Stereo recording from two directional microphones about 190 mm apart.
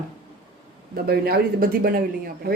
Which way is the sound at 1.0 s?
55° right (ahead or behind).